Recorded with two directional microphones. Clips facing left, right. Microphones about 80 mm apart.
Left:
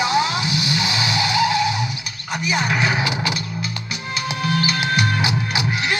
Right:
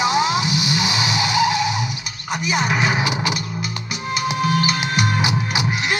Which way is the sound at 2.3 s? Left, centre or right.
Right.